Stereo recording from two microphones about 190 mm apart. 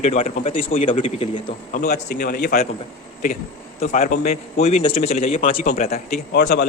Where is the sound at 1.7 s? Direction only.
50° left (ahead or behind).